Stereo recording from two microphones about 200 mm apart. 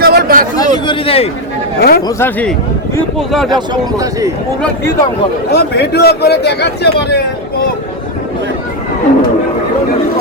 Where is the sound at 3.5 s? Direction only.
20° right (ahead or behind).